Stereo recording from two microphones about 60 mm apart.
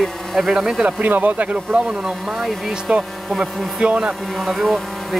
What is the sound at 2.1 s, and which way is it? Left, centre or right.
Speech, centre.